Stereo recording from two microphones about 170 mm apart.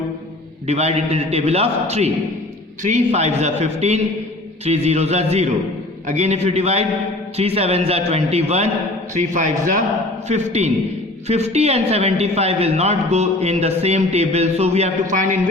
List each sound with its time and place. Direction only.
0.7 s a man's voice: 40° right (ahead or behind)